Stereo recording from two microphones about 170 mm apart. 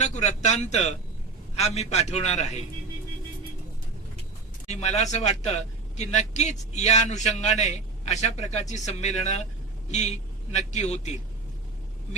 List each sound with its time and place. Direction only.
0.0 s a man's voice: 45° left (ahead or behind)
4.7 s a man's voice: 40° left (ahead or behind)